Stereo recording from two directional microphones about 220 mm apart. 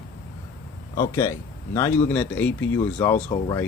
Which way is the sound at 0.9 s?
15° left (ahead or behind).